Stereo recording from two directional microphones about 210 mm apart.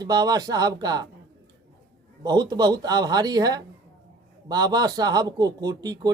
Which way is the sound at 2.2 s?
20° right (ahead or behind).